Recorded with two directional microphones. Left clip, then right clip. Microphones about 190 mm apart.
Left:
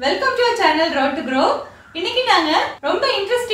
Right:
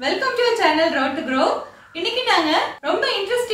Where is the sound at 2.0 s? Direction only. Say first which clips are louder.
Left 2 dB; 5° right (ahead or behind).